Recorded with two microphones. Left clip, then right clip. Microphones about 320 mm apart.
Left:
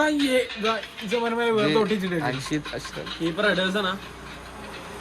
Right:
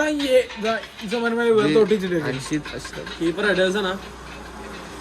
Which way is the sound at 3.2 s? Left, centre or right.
Centre.